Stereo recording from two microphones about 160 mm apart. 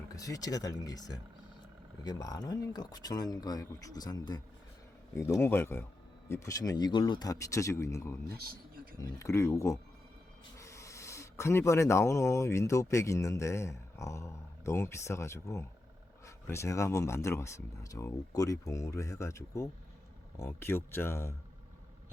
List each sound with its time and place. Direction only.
0.2 s speech: 20° left (ahead or behind)
8.4 s a sound: 65° right (ahead or behind)
9.0 s speech: 20° left (ahead or behind)